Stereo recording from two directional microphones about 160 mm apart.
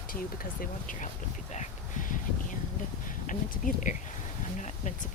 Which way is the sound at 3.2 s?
55° left (ahead or behind).